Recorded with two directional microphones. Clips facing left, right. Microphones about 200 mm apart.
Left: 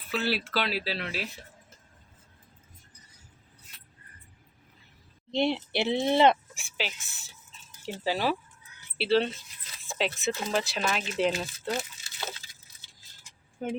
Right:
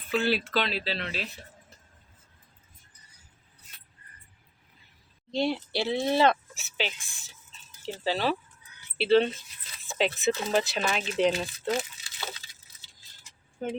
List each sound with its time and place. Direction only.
0.1 s speech: 5° left (ahead or behind)
5.3 s speech: 20° left (ahead or behind); by 11.9 s 5° left (ahead or behind)
13.6 s speech: 10° left (ahead or behind)